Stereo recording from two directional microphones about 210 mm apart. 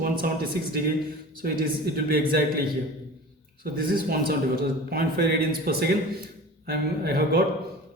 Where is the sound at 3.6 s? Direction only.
45° right (ahead or behind).